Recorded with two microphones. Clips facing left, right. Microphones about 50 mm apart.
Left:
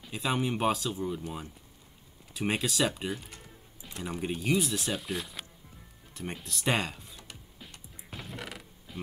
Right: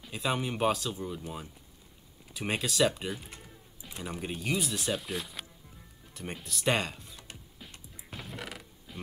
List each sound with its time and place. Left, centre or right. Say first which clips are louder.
0.0 s speech: left 1 dB; centre
2.3 s speech: left 1 dB; centre
7.7 s music: even; centre